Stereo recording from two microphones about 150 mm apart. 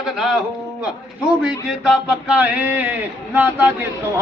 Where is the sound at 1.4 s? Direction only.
5° right (ahead or behind).